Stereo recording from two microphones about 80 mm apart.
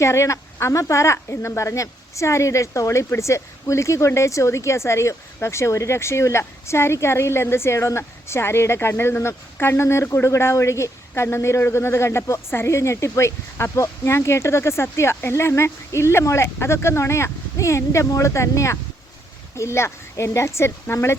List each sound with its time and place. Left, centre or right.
0.0 s speech: left